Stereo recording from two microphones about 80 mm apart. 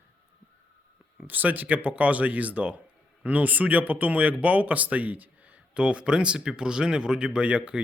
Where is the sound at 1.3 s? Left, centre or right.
Right.